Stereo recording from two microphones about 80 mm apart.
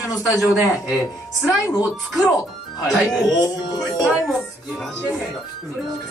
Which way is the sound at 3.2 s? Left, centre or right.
Left.